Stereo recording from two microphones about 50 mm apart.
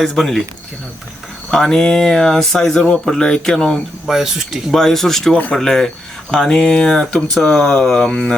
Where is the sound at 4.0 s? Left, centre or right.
Centre.